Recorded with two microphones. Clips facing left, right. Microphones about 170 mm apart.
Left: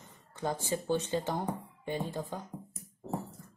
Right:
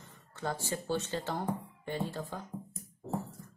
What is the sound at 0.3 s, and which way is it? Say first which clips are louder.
Speech: left 3 dB; 15° left (ahead or behind).